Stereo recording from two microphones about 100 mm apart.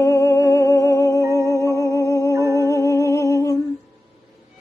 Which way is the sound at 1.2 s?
30° right (ahead or behind).